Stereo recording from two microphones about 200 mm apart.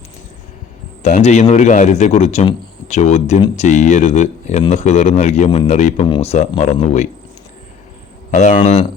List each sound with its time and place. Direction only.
1.0 s speech: 35° left (ahead or behind)
8.3 s speech: 40° left (ahead or behind)